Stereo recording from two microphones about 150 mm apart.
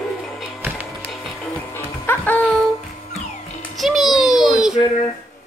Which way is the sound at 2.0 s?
15° left (ahead or behind).